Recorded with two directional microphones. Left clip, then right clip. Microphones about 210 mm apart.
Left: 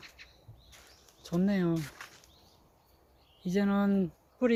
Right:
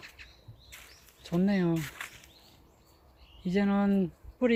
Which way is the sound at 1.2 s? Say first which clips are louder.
Right 2 dB; 5° right (ahead or behind).